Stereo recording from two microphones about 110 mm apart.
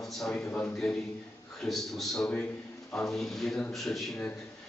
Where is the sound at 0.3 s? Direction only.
20° left (ahead or behind).